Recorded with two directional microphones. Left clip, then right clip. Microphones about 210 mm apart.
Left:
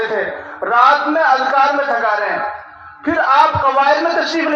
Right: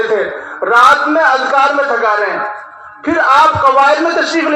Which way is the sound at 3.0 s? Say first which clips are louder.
Right 3 dB; 25° left (ahead or behind).